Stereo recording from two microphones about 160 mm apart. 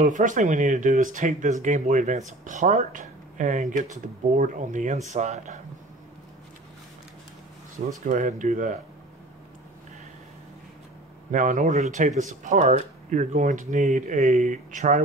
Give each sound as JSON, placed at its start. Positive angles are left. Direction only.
{"t": 0.0, "sound": "speech", "side_deg": -50}
{"t": 8.0, "sound": "speech", "side_deg": -50}
{"t": 11.3, "sound": "speech", "side_deg": -55}